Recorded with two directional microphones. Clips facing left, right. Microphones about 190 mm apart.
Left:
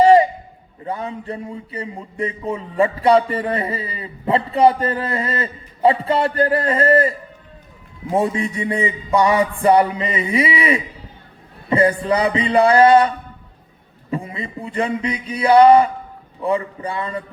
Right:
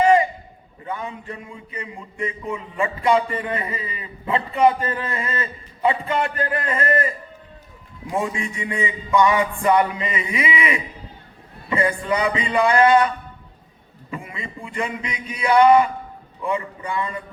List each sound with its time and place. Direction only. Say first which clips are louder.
0.0 s a sound: left 5 dB; 35° left (ahead or behind)
0.9 s a man's voice: left 4 dB; 35° left (ahead or behind)
8.1 s a man's voice: left 6 dB; 35° left (ahead or behind)